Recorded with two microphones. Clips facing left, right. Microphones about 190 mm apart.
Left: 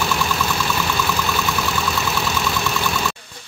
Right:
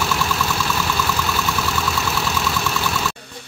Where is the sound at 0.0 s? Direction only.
5° right (ahead or behind).